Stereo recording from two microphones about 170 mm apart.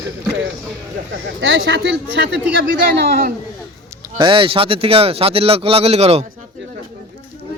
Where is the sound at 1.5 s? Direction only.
90° right.